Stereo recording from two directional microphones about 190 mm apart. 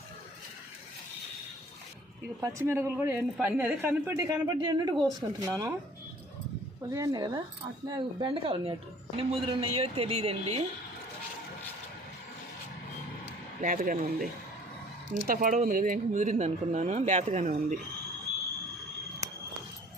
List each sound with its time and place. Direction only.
2.4 s a woman's voice: 15° right (ahead or behind)
6.9 s a woman's voice: 20° right (ahead or behind)
13.6 s speech: 45° right (ahead or behind)